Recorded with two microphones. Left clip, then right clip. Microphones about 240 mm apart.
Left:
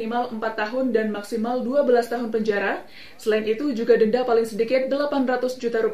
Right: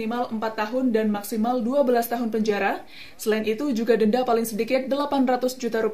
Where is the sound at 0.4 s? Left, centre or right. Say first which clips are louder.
Left 1 dB; right.